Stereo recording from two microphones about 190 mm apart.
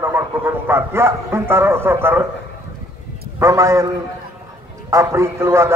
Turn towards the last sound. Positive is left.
turn(degrees=-15)  # may be behind; listen again after turning